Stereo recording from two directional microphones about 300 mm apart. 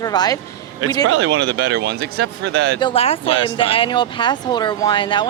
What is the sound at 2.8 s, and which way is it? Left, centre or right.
Speech, centre.